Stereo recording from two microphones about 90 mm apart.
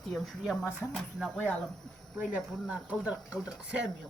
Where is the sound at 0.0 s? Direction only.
5° left (ahead or behind).